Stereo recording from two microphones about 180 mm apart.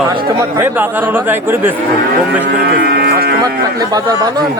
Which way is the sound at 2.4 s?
70° right (ahead or behind).